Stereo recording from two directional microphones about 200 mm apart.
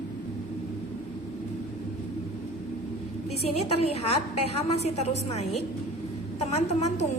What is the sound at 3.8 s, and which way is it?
A woman's voice, 30° left (ahead or behind).